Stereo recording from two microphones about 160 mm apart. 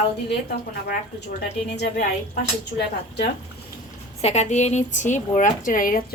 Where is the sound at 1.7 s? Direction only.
75° left (ahead or behind).